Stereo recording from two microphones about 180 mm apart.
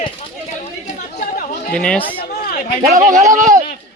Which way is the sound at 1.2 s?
50° left (ahead or behind).